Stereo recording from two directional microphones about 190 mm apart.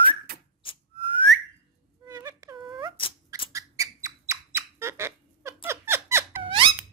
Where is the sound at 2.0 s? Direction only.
15° right (ahead or behind).